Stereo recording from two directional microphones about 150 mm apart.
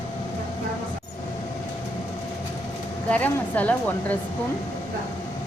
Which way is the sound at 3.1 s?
10° left (ahead or behind).